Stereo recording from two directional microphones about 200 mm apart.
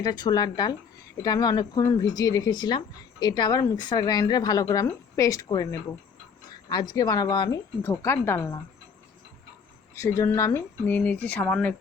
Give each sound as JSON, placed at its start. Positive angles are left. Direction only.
{"t": 0.0, "sound": "a woman's voice", "side_deg": 20}
{"t": 7.8, "sound": "speech", "side_deg": 10}
{"t": 9.9, "sound": "speech", "side_deg": 15}